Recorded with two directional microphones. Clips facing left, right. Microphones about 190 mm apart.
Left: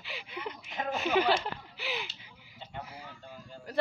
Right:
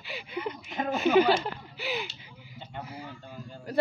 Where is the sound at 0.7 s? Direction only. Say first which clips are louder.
Right 4 dB; 45° right (ahead or behind).